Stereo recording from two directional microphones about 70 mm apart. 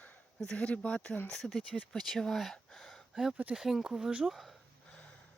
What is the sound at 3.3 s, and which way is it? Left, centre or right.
Speech, centre.